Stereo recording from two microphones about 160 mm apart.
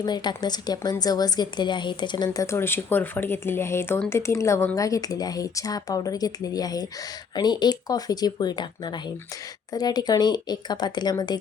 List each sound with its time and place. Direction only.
0.0 s speech: 25° left (ahead or behind)